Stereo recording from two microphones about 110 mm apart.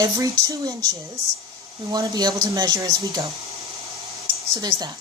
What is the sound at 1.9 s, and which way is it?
Speech, 35° right (ahead or behind).